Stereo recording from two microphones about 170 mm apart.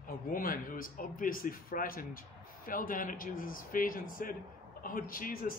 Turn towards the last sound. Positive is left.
turn(degrees=55)  # may be behind; listen again after turning